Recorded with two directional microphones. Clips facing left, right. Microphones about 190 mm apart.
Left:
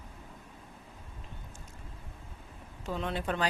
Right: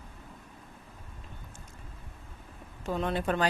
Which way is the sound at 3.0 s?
50° right (ahead or behind).